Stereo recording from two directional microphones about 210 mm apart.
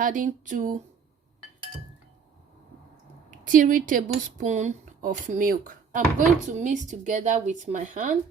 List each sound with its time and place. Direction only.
0.0 s speech: 40° right (ahead or behind)
3.2 s speech: 40° right (ahead or behind)